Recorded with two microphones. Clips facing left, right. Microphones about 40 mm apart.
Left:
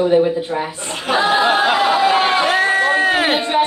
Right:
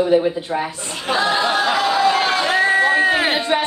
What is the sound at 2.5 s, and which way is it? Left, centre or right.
Crowd, centre.